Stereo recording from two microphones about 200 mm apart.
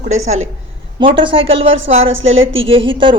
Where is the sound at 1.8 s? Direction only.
80° right.